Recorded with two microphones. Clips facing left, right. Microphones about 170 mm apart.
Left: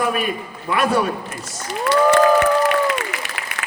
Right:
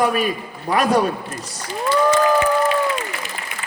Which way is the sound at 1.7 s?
75° left (ahead or behind).